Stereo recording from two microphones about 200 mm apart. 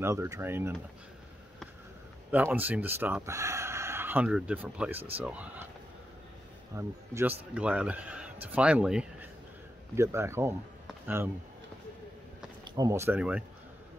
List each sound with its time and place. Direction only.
0.0 s speech: 15° right (ahead or behind)
2.3 s speech: 10° right (ahead or behind)
6.7 s speech: 15° right (ahead or behind)
12.7 s speech: 15° right (ahead or behind)